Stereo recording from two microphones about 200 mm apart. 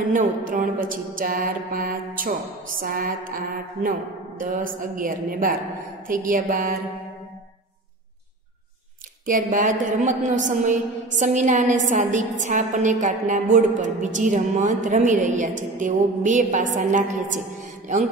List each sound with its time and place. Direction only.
0.5 s a woman's voice: 40° right (ahead or behind)
9.2 s a woman's voice: 40° right (ahead or behind)